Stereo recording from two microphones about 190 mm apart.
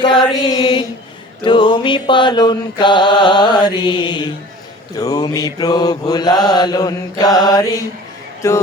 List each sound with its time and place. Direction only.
0.0 s chant: 25° left (ahead or behind)
1.5 s mantra: 25° left (ahead or behind)
8.4 s a man's voice: 15° left (ahead or behind)